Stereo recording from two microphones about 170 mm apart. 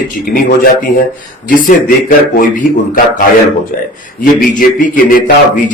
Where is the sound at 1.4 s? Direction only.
55° left (ahead or behind).